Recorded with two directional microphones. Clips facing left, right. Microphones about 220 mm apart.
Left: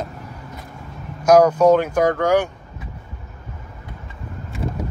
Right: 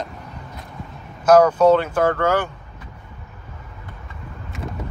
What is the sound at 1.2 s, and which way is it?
Speech, 10° left (ahead or behind).